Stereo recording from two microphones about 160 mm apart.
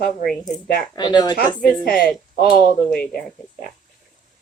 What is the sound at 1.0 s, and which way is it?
Speech, 25° left (ahead or behind).